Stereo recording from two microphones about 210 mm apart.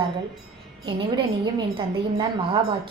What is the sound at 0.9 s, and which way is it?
A woman's voice, 20° right (ahead or behind).